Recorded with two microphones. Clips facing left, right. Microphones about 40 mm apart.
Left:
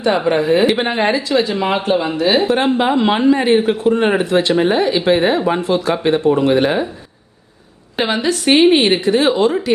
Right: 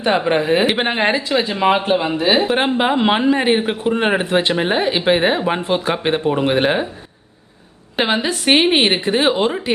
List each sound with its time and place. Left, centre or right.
0.3 s speech: right
8.0 s speech: centre